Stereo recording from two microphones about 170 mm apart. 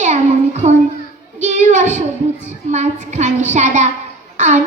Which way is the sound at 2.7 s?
45° right (ahead or behind).